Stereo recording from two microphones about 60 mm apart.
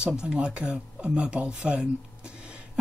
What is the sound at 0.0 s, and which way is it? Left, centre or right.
Speech, centre.